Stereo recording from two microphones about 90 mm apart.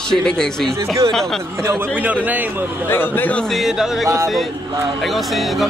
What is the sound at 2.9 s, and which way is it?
Speech, 20° left (ahead or behind).